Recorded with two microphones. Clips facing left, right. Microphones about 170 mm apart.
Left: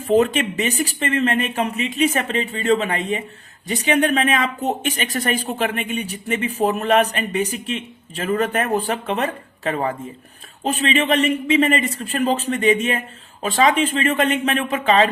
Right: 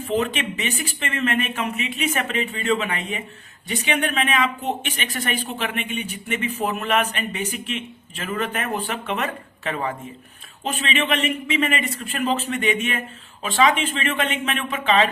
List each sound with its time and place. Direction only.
0.0 s speech: 40° left (ahead or behind)